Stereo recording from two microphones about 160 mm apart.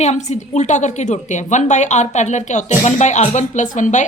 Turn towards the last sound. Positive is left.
turn(degrees=50)  # may be behind; listen again after turning